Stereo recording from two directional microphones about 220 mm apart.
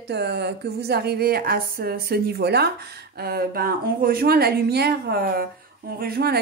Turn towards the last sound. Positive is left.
turn(degrees=-45)  # may be behind; listen again after turning